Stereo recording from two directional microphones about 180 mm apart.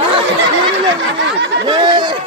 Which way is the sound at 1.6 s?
25° right (ahead or behind).